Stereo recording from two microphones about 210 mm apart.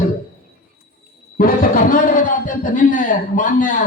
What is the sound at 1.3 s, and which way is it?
Speech, 40° left (ahead or behind).